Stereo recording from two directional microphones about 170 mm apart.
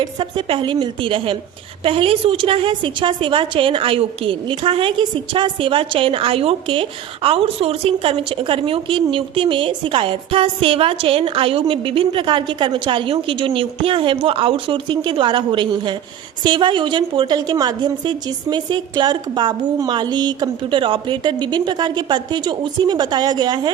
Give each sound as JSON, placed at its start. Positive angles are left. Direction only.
{"t": 0.0, "sound": "a woman's voice", "side_deg": -30}